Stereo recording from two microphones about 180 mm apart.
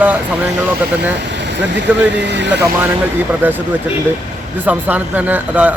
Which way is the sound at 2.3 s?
75° right (ahead or behind).